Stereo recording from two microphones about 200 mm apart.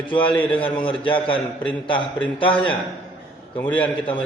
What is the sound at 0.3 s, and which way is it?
Speech, 10° left (ahead or behind).